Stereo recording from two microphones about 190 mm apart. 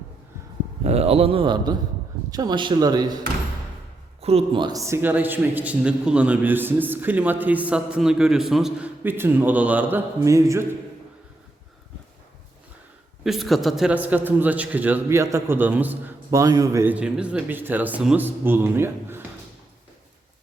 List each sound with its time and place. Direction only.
0.9 s a man's voice: 35° right (ahead or behind)
4.2 s a man's voice: 30° right (ahead or behind); by 10.7 s 15° right (ahead or behind)
13.2 s a man's voice: centre (ahead or behind)